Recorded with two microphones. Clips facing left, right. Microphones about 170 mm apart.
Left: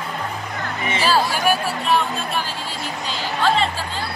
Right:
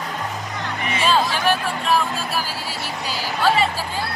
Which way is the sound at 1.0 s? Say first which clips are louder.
Even; 10° left (ahead or behind).